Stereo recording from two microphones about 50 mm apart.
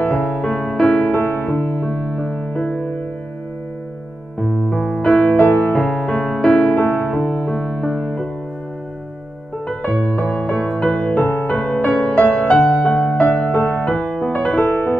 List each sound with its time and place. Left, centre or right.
0.0 s music: left
0.4 s music: centre
1.1 s music: left
4.4 s music: centre
5.0 s music: left
5.4 s music: left
5.9 s music: centre
6.7 s music: left; by 8.1 s centre
9.8 s music: centre
10.8 s music: left
12.7 s music: centre
13.5 s music: left
13.8 s music: centre
14.3 s music: left